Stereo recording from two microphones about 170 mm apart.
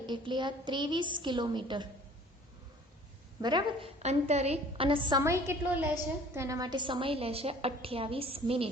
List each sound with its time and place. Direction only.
0.0 s a woman's voice: 25° right (ahead or behind)
3.4 s a woman's voice: 25° right (ahead or behind)
4.0 s a woman's voice: 40° right (ahead or behind)
5.2 s a woman's voice: 15° right (ahead or behind); by 8.7 s 35° right (ahead or behind)